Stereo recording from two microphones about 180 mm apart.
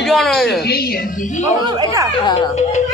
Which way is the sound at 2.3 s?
35° left (ahead or behind).